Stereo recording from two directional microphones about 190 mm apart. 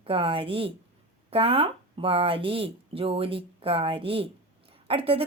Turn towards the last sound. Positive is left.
turn(degrees=-30)  # may be behind; listen again after turning